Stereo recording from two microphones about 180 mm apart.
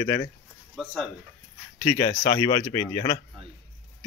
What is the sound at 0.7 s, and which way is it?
Speech, centre (ahead or behind).